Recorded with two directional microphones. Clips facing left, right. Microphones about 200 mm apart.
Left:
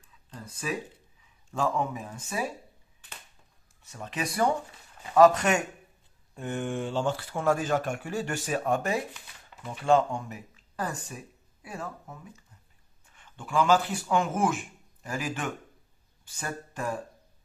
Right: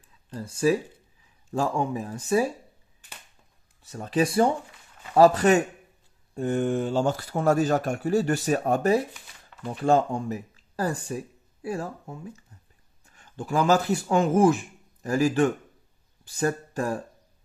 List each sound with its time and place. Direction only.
0.3 s speech: 30° right (ahead or behind)
3.8 s speech: 35° right (ahead or behind)